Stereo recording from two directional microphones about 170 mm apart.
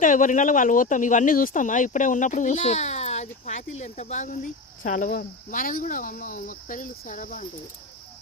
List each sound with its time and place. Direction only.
0.0 s speech: 50° left (ahead or behind)